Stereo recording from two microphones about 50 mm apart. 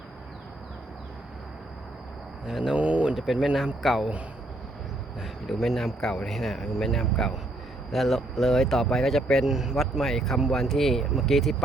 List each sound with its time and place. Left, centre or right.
2.5 s speech: centre
2.7 s a sound: right
3.4 s speech: centre
5.2 s speech: centre
9.3 s speech: centre